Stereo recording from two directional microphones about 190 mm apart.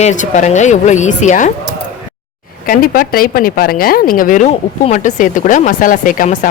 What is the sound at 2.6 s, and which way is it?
Speech, 50° left (ahead or behind).